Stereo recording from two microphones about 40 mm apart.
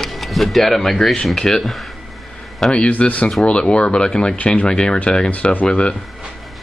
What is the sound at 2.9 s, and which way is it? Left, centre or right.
Speech, left.